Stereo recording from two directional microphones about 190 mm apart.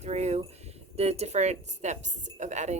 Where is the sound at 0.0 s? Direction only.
35° right (ahead or behind).